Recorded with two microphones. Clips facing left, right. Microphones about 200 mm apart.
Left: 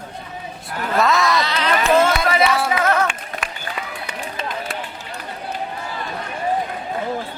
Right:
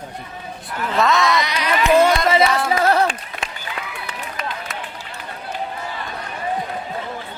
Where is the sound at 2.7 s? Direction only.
35° right (ahead or behind).